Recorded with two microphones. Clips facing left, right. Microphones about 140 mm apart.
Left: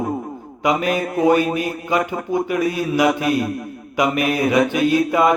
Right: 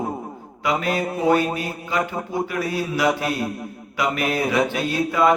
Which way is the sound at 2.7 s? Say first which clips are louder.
Left 2 dB; 15° left (ahead or behind).